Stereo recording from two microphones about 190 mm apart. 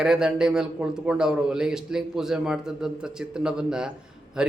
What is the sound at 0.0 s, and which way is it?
Speech, 5° right (ahead or behind).